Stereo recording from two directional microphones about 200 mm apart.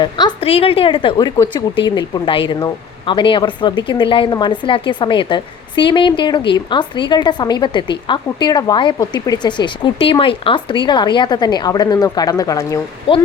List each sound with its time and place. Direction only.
0.0 s speech: 20° left (ahead or behind)